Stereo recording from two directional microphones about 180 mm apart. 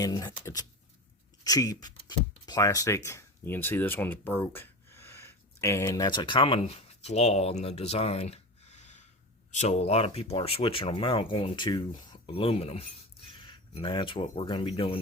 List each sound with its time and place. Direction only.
0.0 s speech: 20° left (ahead or behind)